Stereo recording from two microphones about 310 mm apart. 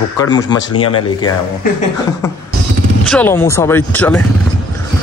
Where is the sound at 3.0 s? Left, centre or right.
Centre.